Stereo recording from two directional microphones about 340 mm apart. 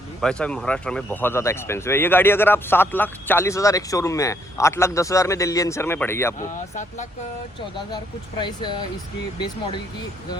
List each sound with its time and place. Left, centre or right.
0.2 s speech: centre
6.7 s speech: left
8.4 s speech: centre